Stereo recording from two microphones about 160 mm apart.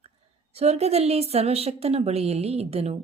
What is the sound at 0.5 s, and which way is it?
A woman's voice, 40° right (ahead or behind).